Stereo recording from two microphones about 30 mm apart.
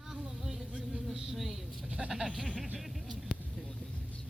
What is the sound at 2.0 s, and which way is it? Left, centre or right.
Speech, centre.